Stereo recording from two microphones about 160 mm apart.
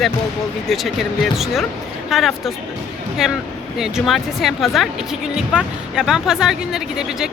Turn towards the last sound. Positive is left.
turn(degrees=-5)  # may be behind; listen again after turning